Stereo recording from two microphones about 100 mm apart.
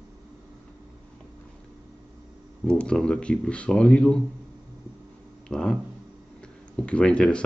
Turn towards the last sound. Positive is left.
turn(degrees=10)  # may be behind; listen again after turning